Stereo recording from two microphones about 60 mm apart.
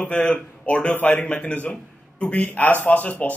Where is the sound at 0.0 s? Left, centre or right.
Left.